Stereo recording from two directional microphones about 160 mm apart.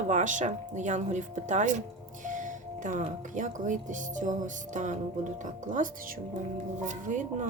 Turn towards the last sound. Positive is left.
turn(degrees=-50)  # may be behind; listen again after turning